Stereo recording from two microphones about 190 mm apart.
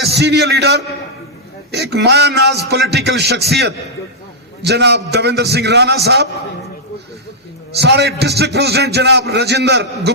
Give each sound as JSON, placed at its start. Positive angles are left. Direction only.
{"t": 0.1, "sound": "a man's voice", "side_deg": -60}
{"t": 7.8, "sound": "a man's voice", "side_deg": -60}